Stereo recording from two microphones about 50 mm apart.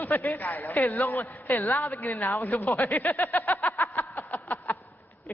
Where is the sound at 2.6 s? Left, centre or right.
Left.